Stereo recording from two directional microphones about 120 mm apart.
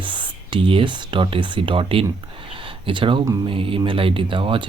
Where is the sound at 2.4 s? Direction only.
45° right (ahead or behind).